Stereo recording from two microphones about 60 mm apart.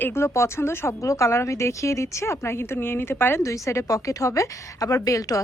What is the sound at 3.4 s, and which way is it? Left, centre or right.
A woman's voice, left.